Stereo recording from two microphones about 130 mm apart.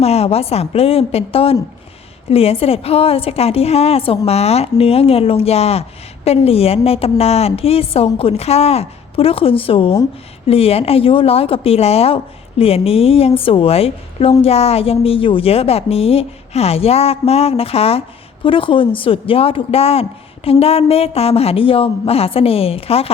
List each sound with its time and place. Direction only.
0.0 s a woman's voice: 55° left (ahead or behind)